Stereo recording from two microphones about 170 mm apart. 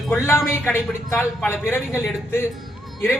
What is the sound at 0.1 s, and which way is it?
A man's voice, 15° left (ahead or behind).